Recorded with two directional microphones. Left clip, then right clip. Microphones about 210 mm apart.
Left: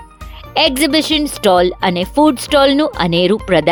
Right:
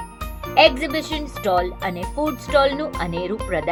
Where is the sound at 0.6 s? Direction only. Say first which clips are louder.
Left 3 dB; 50° left (ahead or behind).